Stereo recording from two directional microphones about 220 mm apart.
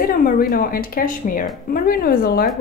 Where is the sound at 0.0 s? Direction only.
40° left (ahead or behind).